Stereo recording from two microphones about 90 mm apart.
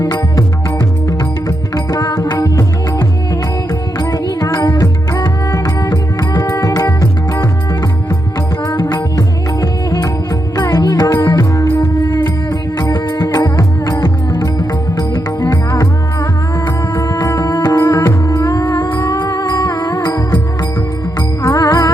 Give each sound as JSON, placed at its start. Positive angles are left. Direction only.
{"t": 0.0, "sound": "music", "side_deg": 40}
{"t": 1.5, "sound": "music", "side_deg": 45}
{"t": 8.6, "sound": "music", "side_deg": 50}
{"t": 11.8, "sound": "music", "side_deg": 50}
{"t": 17.0, "sound": "music", "side_deg": 45}